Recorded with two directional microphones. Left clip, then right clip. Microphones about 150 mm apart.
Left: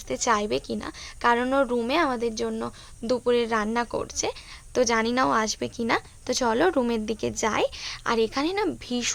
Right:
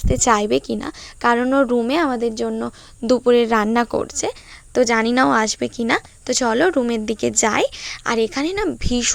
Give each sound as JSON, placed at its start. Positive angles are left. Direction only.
{"t": 0.0, "sound": "a woman's voice", "side_deg": -45}